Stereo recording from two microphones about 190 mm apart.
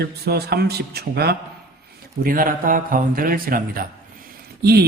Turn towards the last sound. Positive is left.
turn(degrees=-55)  # may be behind; listen again after turning